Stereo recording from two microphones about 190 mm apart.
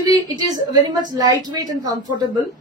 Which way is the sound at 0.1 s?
20° right (ahead or behind).